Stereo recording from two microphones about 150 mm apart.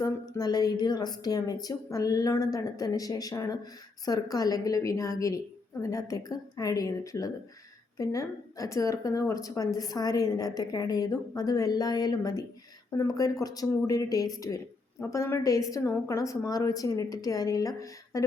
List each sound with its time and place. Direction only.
0.0 s a woman's voice: 25° left (ahead or behind)